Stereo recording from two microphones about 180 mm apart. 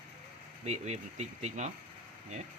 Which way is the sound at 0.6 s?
40° right (ahead or behind).